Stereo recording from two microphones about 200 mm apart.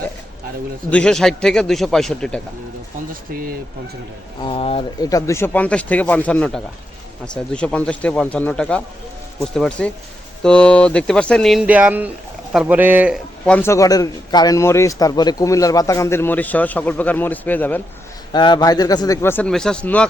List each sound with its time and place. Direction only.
0.9 s speech: 5° left (ahead or behind)
4.4 s speech: 30° left (ahead or behind)
5.0 s a man's voice: 15° left (ahead or behind); by 13.1 s 10° right (ahead or behind)
13.4 s a man's voice: 10° left (ahead or behind)
18.3 s a man's voice: 20° left (ahead or behind); by 20.1 s 5° left (ahead or behind)